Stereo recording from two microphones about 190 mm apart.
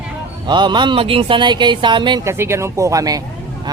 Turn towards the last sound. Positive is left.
turn(degrees=-20)  # may be behind; listen again after turning